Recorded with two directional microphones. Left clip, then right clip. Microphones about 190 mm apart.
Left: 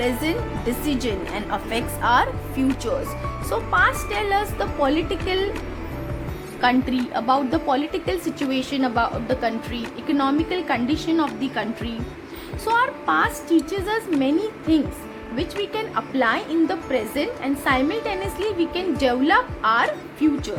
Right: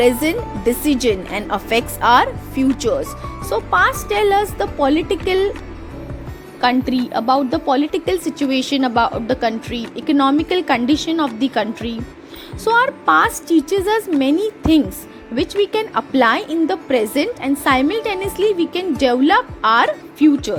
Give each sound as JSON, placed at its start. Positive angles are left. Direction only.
{"t": 0.0, "sound": "speech", "side_deg": -35}
{"t": 6.6, "sound": "speech", "side_deg": -35}
{"t": 15.4, "sound": "speech", "side_deg": -40}